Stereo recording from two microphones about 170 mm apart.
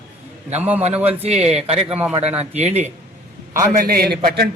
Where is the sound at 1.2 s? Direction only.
40° right (ahead or behind).